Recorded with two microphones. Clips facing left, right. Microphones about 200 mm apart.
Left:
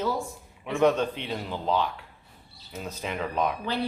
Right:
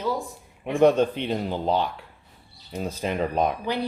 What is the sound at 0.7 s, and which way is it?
Speech, 35° right (ahead or behind).